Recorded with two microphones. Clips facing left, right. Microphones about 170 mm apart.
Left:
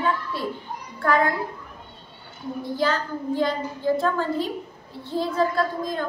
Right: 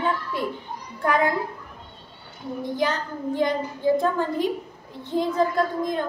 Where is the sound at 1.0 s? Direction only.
15° right (ahead or behind).